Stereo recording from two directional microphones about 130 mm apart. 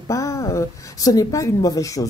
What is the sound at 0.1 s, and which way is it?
A woman's voice, 25° left (ahead or behind).